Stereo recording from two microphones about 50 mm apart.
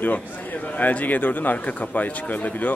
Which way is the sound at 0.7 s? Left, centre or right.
Left.